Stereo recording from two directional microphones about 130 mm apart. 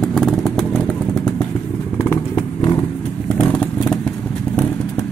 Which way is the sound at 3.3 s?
10° left (ahead or behind).